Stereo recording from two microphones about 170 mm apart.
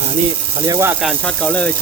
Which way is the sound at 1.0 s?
Centre (ahead or behind).